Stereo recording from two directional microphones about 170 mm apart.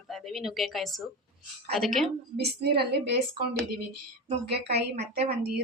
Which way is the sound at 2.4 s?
70° right (ahead or behind).